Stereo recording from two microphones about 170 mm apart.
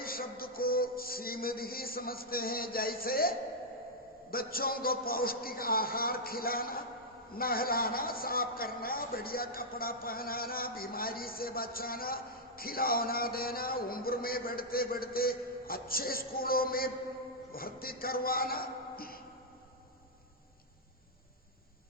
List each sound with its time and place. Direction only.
0.0 s music: 60° left (ahead or behind)
4.3 s a man's voice: 60° left (ahead or behind)